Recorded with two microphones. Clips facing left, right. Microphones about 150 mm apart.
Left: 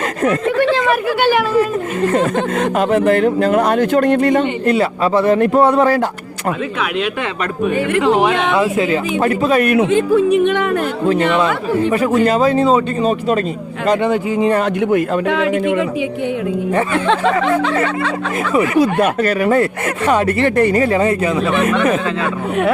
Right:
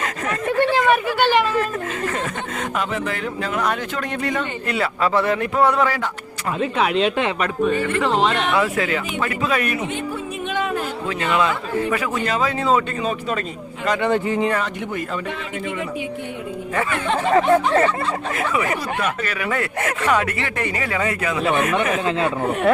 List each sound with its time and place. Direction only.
0.8 s speech: centre (ahead or behind)
2.7 s a man's voice: 55° left (ahead or behind)
4.7 s a man's voice: 25° left (ahead or behind)
5.3 s a man's voice: 35° left (ahead or behind)
6.7 s speech: 30° right (ahead or behind)
7.6 s speech: 10° left (ahead or behind)
9.2 s a man's voice: 40° left (ahead or behind)
9.6 s speech: 80° left; by 10.8 s 65° left (ahead or behind)
11.1 s a man's voice: 30° left (ahead or behind)
14.1 s speech: 10° left (ahead or behind)
14.6 s speech: 65° left (ahead or behind)
15.3 s speech: 90° left
17.4 s speech: 90° left
18.8 s a man's voice: 50° left (ahead or behind); by 21.4 s 30° left (ahead or behind)